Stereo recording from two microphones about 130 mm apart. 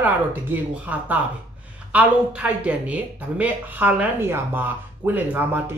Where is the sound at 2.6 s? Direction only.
10° right (ahead or behind).